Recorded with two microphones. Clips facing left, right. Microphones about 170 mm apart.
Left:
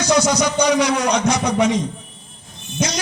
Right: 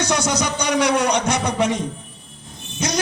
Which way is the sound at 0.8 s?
65° right (ahead or behind).